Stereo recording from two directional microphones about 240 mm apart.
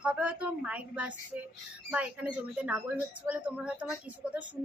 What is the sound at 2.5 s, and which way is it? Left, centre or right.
Speech, centre.